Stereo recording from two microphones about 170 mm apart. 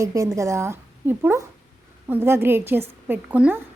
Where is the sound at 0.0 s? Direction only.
20° right (ahead or behind).